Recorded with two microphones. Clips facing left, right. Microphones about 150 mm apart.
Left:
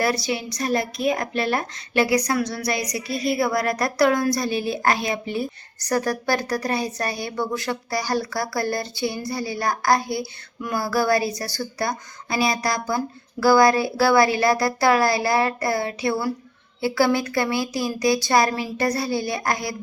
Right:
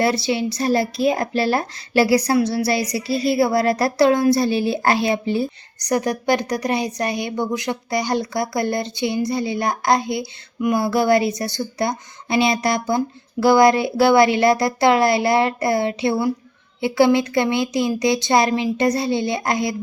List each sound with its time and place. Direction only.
0.0 s a woman's voice: 25° right (ahead or behind)
5.8 s a woman's voice: 20° right (ahead or behind)